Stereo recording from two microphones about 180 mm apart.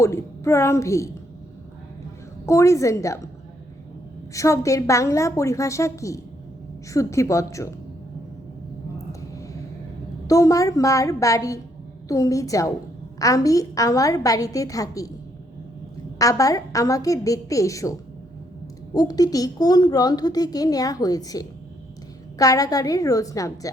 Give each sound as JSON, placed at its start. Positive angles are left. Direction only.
{"t": 0.0, "sound": "a woman's voice", "side_deg": 15}
{"t": 2.5, "sound": "a woman's voice", "side_deg": 15}
{"t": 4.4, "sound": "a woman's voice", "side_deg": 15}
{"t": 10.2, "sound": "a woman's voice", "side_deg": 20}
{"t": 16.1, "sound": "speech", "side_deg": 20}
{"t": 18.9, "sound": "speech", "side_deg": 20}